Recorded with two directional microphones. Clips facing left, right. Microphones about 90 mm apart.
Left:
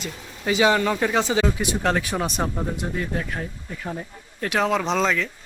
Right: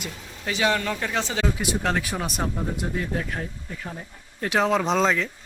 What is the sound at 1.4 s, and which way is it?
Speech, centre (ahead or behind).